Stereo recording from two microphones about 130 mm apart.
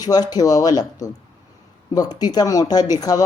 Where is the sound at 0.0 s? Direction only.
30° left (ahead or behind).